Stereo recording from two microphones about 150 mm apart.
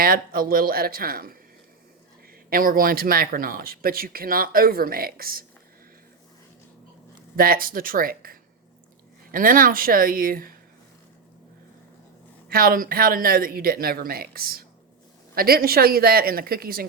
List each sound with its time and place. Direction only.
0.0 s speech: 80° right
2.5 s speech: 70° right (ahead or behind)
7.3 s speech: 80° right
12.5 s a woman's voice: 75° right (ahead or behind)